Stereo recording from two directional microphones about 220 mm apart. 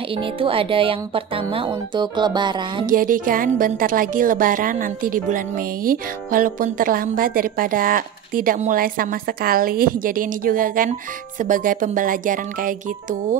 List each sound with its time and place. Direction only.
0.1 s speech: 25° right (ahead or behind)
2.9 s a woman's voice: 40° right (ahead or behind)